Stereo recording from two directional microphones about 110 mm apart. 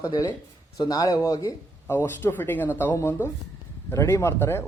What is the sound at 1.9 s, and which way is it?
A man's voice, 20° left (ahead or behind).